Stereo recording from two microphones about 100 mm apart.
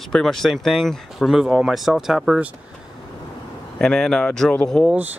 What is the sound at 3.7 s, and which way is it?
Speech, 5° left (ahead or behind).